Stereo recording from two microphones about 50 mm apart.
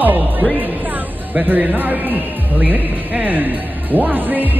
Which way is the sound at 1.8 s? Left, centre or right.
Right.